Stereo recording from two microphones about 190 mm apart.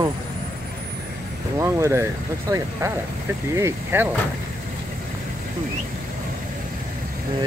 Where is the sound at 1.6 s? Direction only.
15° right (ahead or behind).